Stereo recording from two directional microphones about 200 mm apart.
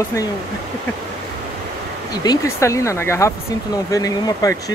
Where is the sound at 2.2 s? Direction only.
15° left (ahead or behind).